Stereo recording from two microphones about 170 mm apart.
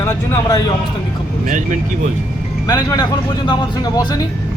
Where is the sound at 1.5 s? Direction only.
45° right (ahead or behind).